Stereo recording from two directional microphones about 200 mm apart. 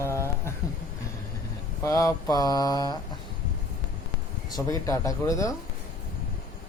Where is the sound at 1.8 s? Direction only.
15° left (ahead or behind).